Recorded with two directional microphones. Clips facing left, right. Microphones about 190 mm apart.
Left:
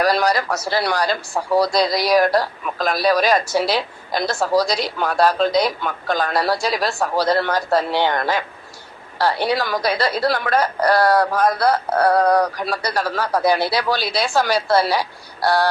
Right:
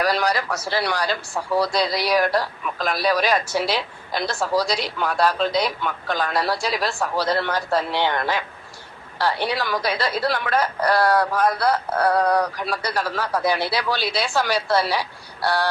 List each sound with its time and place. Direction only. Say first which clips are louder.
0.0 s a man's voice: left 4 dB; 40° left (ahead or behind)